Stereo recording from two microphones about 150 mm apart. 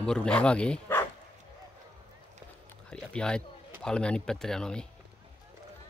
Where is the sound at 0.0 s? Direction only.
5° left (ahead or behind).